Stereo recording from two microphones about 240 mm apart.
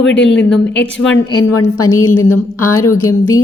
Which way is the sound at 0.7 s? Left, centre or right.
Left.